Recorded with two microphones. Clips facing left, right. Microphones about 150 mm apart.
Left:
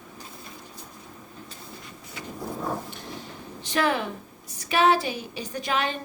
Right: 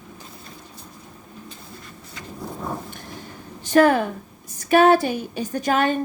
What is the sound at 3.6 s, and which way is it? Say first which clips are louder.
A woman's voice: right 9 dB; 45° right (ahead or behind).